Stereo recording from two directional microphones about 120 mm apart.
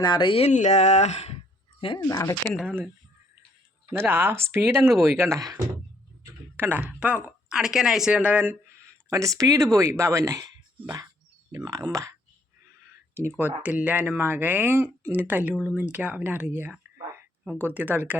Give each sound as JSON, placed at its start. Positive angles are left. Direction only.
{"t": 0.0, "sound": "a sound", "side_deg": 40}
{"t": 0.5, "sound": "speech", "side_deg": 70}
{"t": 1.8, "sound": "a sound", "side_deg": 45}
{"t": 2.0, "sound": "speech", "side_deg": 30}
{"t": 2.6, "sound": "speech", "side_deg": -10}
{"t": 3.9, "sound": "speech", "side_deg": -20}
{"t": 6.6, "sound": "speech", "side_deg": -15}
{"t": 9.0, "sound": "speech", "side_deg": -25}
{"t": 13.6, "sound": "speech", "side_deg": -15}